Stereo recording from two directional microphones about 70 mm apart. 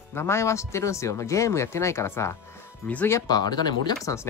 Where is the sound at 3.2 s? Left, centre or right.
Left.